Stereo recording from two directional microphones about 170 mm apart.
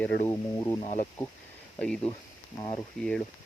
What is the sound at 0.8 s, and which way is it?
Speech, 40° left (ahead or behind).